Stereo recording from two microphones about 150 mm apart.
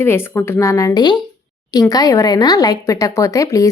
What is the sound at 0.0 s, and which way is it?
A woman's voice, 15° left (ahead or behind).